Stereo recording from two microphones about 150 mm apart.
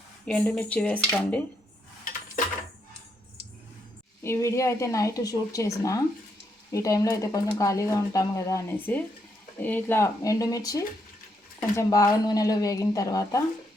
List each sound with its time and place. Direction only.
0.3 s speech: 5° left (ahead or behind)
4.2 s speech: 20° left (ahead or behind)